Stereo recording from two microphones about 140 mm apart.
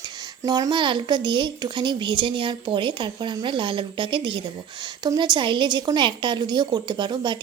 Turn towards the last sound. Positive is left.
turn(degrees=-30)  # may be behind; listen again after turning